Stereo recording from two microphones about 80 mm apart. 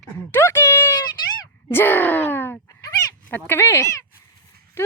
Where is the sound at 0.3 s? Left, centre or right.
Left.